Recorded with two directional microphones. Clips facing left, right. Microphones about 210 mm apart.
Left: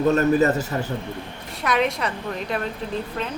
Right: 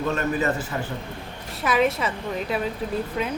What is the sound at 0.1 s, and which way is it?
Speech, 40° left (ahead or behind).